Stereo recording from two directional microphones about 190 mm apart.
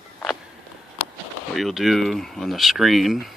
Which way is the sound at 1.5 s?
Centre (ahead or behind).